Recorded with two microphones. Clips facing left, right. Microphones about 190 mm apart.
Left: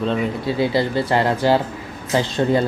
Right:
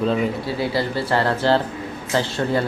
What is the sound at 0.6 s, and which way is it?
Speech, 20° left (ahead or behind).